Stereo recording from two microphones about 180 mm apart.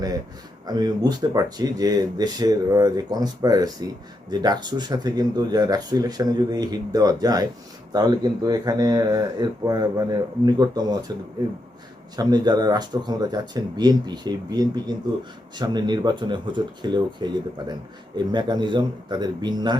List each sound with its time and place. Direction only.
0.7 s speech: 20° right (ahead or behind)
12.1 s speech: 20° right (ahead or behind)